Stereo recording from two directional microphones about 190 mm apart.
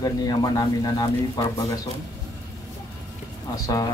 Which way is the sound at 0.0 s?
20° left (ahead or behind).